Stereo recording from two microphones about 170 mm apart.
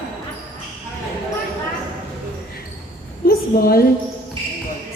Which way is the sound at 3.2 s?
60° left (ahead or behind).